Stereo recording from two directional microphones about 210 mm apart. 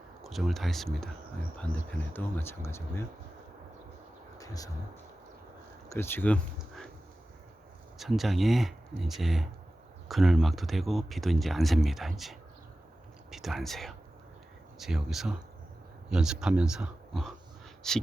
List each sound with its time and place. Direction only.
0.2 s speech: centre (ahead or behind)
2.1 s speech: 10° left (ahead or behind)
4.4 s a sound: 15° left (ahead or behind)
5.9 s speech: 10° left (ahead or behind)
7.9 s speech: centre (ahead or behind)